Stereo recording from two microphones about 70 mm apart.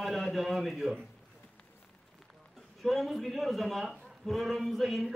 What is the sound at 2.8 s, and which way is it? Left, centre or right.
Speech, centre.